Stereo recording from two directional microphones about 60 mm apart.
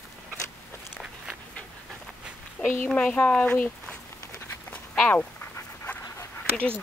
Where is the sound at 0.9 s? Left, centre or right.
Centre.